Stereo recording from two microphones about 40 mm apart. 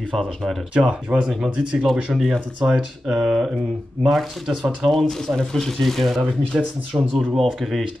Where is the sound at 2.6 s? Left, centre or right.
Centre.